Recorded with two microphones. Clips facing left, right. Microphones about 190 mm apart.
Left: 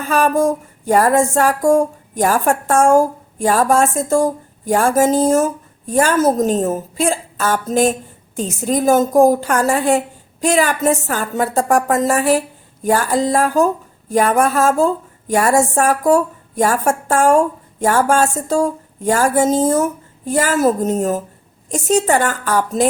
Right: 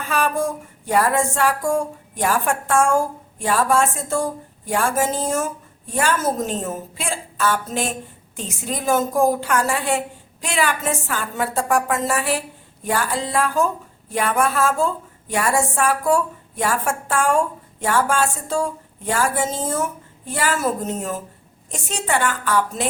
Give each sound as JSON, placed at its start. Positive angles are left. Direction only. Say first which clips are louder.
{"t": 0.0, "sound": "music", "louder": "left 7 dB", "side_deg": 45}
{"t": 8.4, "sound": "a woman's voice", "louder": "left 10 dB", "side_deg": 40}
{"t": 12.8, "sound": "music", "louder": "left 7 dB", "side_deg": 40}